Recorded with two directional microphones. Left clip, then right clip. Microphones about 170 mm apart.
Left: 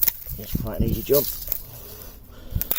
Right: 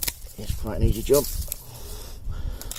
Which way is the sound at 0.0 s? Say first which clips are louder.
Even; 10° right (ahead or behind).